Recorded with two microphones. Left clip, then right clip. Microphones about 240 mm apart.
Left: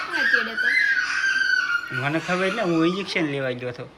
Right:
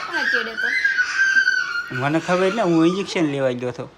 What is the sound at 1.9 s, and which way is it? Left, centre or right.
Speech, centre.